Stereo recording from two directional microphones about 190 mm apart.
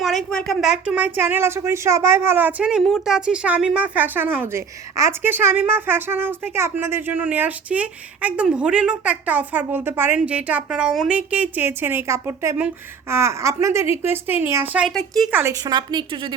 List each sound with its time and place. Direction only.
0.0 s speech: centre (ahead or behind)
15.3 s speech: 10° right (ahead or behind)
15.6 s a woman's voice: 25° right (ahead or behind)